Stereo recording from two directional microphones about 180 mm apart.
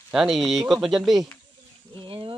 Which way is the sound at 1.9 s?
30° right (ahead or behind).